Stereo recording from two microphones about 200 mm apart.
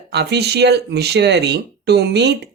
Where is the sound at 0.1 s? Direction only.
55° right (ahead or behind).